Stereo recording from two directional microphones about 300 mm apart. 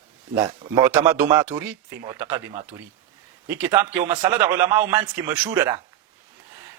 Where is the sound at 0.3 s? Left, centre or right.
Centre.